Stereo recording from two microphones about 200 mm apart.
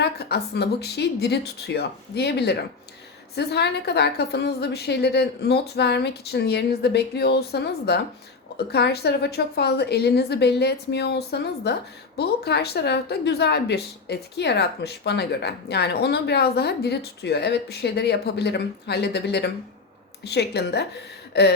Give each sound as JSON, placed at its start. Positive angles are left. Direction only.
{"t": 0.0, "sound": "a woman's voice", "side_deg": 55}